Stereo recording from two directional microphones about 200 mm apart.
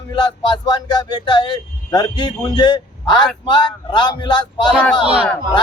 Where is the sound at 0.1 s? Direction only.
20° left (ahead or behind).